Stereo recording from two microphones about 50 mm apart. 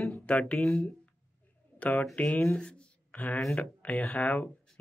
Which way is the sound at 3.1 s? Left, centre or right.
Left.